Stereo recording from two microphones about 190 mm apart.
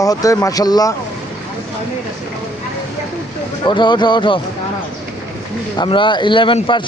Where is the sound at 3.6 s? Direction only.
25° left (ahead or behind).